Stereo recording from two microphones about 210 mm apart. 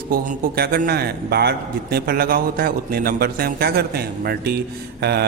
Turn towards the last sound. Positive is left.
turn(degrees=-50)  # may be behind; listen again after turning